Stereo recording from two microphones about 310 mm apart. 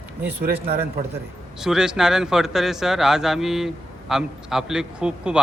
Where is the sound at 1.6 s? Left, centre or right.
Centre.